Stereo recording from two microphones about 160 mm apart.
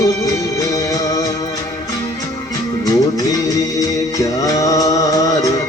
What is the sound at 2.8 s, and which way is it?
Music, 25° left (ahead or behind).